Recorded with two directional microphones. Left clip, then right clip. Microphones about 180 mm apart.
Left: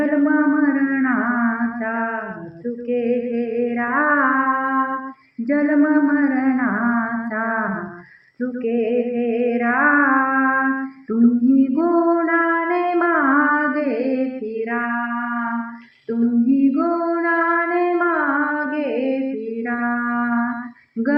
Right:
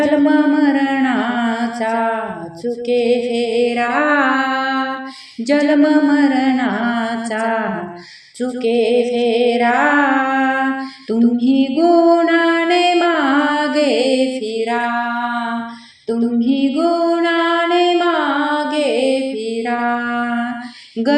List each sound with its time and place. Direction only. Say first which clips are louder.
0.0 s a sound: right 4 dB; 45° right (ahead or behind)
2.9 s music: right 5 dB; 50° right (ahead or behind)
21.0 s female singing: right 5 dB; 45° right (ahead or behind)